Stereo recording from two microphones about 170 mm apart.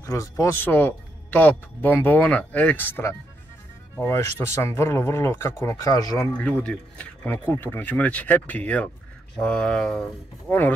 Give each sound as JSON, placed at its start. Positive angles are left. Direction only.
{"t": 0.0, "sound": "a man's voice", "side_deg": 20}
{"t": 6.3, "sound": "a man's voice", "side_deg": 10}